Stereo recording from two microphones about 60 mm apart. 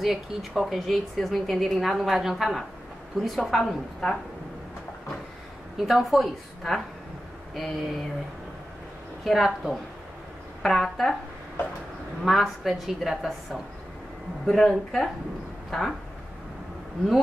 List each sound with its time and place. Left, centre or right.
0.0 s a woman's voice: centre
5.8 s a woman's voice: centre
9.2 s a woman's voice: centre
12.2 s a woman's voice: centre